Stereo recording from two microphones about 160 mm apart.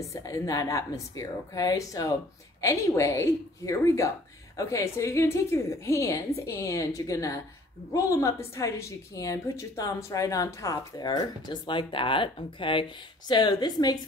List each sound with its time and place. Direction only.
0.0 s a woman's voice: 20° left (ahead or behind)